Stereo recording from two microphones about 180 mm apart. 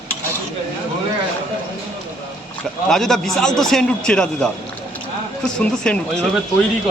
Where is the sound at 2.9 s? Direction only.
Centre (ahead or behind).